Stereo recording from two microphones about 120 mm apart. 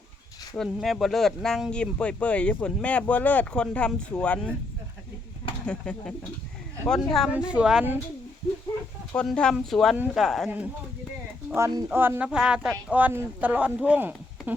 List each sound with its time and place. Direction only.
0.5 s speech: centre (ahead or behind)
5.6 s speech: 10° left (ahead or behind)
7.3 s speech: 10° right (ahead or behind)
9.1 s speech: 5° left (ahead or behind)
11.5 s speech: 25° right (ahead or behind)
11.9 s speech: 15° right (ahead or behind)